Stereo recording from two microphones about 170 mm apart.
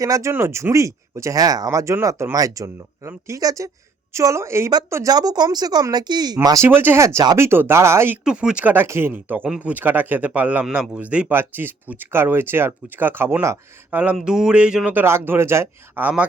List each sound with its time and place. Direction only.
0.0 s a woman's voice: 20° right (ahead or behind)